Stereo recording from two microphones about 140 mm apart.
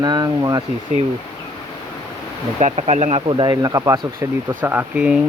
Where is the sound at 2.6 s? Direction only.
55° right (ahead or behind).